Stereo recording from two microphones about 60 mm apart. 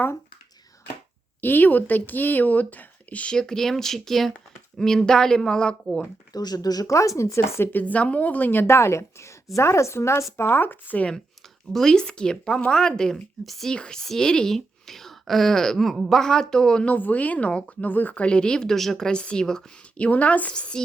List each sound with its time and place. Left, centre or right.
1.4 s a woman's voice: left
3.3 s speech: centre
6.3 s speech: left
7.7 s a woman's voice: left
11.7 s speech: centre
13.7 s speech: centre
16.9 s a woman's voice: left; by 19.6 s centre
20.0 s a woman's voice: left